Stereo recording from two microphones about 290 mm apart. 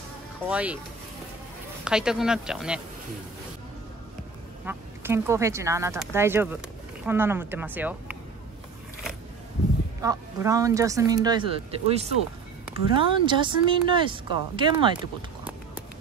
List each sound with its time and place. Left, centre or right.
0.5 s speech: centre
1.9 s speech: centre
4.6 s speech: centre
10.0 s speech: centre